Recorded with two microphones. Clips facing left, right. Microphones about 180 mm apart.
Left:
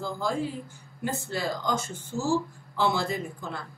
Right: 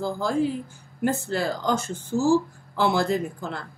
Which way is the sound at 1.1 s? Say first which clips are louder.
Right 5 dB; 70° right (ahead or behind).